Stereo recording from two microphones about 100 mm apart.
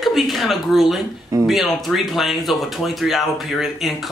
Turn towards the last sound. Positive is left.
turn(degrees=0)  # may be behind; listen again after turning